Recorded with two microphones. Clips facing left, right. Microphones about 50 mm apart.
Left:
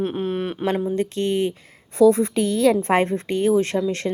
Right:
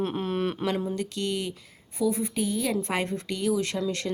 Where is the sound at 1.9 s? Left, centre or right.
Left.